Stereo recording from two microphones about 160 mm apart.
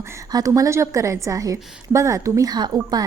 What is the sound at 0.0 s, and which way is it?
Speech, 20° right (ahead or behind).